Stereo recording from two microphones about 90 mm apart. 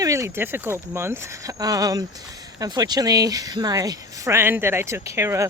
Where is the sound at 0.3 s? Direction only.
25° right (ahead or behind).